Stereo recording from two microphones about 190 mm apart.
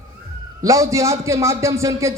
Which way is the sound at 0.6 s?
15° right (ahead or behind).